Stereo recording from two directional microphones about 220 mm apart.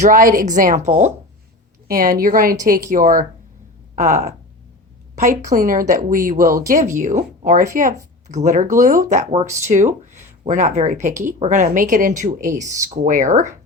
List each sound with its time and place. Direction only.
0.0 s a woman's voice: 40° right (ahead or behind)
11.1 s speech: 15° right (ahead or behind)
11.3 s speech: 35° right (ahead or behind)